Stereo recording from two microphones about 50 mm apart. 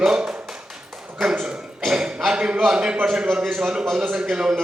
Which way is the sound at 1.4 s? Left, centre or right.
Centre.